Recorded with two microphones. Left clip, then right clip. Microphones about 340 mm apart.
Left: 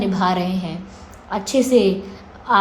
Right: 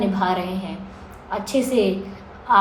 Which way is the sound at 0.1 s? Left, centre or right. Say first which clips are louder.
Left 2 dB; left.